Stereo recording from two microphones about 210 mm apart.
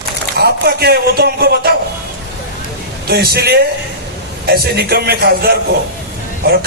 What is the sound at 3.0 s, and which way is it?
A man's voice, 50° right (ahead or behind).